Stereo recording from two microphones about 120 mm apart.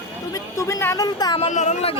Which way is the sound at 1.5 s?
75° left (ahead or behind).